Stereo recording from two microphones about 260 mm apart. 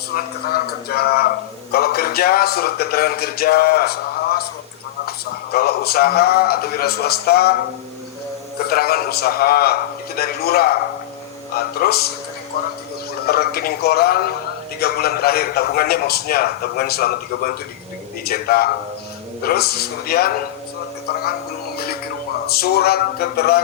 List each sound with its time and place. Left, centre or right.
0.9 s speech: left
8.6 s speech: left
13.2 s speech: left
22.4 s speech: left